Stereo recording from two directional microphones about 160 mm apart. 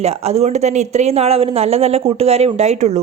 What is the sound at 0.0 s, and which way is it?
A woman's voice, 40° right (ahead or behind).